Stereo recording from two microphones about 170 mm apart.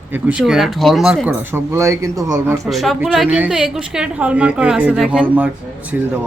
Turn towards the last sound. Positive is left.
turn(degrees=-10)  # may be behind; listen again after turning